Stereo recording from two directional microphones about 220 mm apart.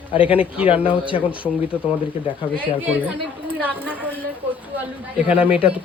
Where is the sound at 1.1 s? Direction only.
25° left (ahead or behind).